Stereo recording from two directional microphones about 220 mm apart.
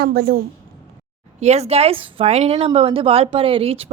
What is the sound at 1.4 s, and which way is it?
Speech, 30° right (ahead or behind).